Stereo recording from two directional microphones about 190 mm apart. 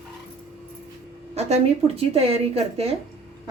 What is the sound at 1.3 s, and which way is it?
Speech, 35° right (ahead or behind).